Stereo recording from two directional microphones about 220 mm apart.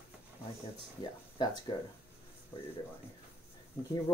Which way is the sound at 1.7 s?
20° left (ahead or behind).